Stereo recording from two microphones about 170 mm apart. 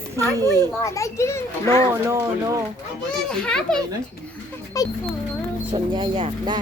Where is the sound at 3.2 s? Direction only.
5° left (ahead or behind).